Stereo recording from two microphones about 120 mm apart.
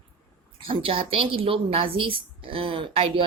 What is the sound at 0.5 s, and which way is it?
A woman's voice, 50° right (ahead or behind).